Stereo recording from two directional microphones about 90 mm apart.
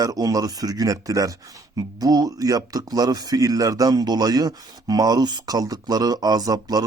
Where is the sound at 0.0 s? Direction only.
40° right (ahead or behind).